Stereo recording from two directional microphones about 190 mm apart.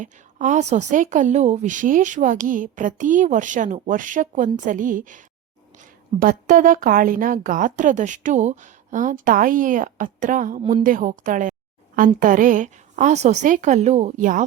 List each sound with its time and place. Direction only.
0.0 s a woman's voice: 40° right (ahead or behind)
10.6 s a woman's voice: 25° right (ahead or behind)
10.8 s a woman's voice: 45° right (ahead or behind)